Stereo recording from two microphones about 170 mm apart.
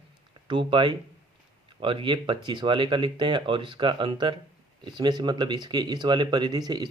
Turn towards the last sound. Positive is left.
turn(degrees=-25)  # may be behind; listen again after turning